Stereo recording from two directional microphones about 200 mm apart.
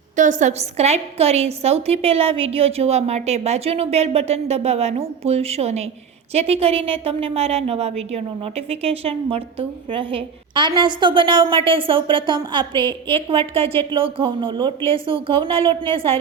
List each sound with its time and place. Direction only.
0.2 s a woman's voice: 40° right (ahead or behind)